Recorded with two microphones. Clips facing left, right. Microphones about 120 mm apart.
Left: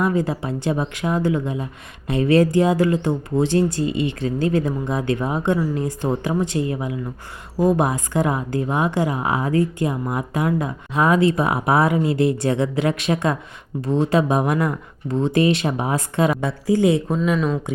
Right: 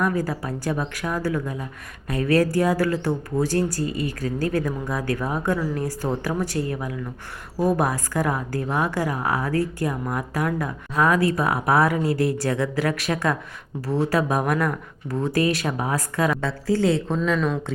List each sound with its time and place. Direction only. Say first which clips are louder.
0.0 s speech: left 3 dB; 20° left (ahead or behind)
17.2 s speech: left 2 dB; 5° left (ahead or behind)